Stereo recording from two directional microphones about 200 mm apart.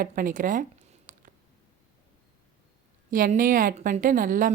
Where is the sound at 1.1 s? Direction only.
40° right (ahead or behind).